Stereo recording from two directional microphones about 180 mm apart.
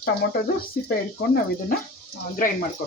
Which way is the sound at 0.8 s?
50° left (ahead or behind).